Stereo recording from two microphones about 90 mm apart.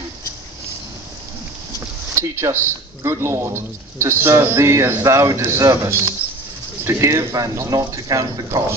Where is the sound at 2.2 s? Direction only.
30° right (ahead or behind).